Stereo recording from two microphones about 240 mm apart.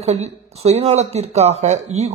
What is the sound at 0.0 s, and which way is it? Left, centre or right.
Speech, right.